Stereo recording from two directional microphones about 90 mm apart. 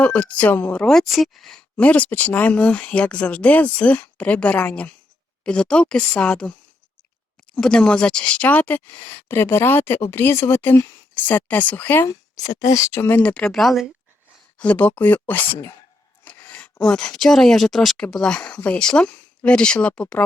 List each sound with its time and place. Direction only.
0.0 s speech: 15° left (ahead or behind)
1.8 s speech: 15° left (ahead or behind)
7.5 s speech: 10° left (ahead or behind)
12.0 s speech: 40° left (ahead or behind)
12.9 s speech: 25° left (ahead or behind)
13.5 s speech: centre (ahead or behind)
14.6 s speech: 15° left (ahead or behind)
16.2 s a sound: 15° left (ahead or behind)
16.8 s speech: 5° left (ahead or behind)